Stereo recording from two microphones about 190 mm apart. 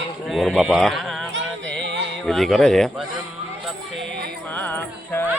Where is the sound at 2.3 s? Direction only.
Centre (ahead or behind).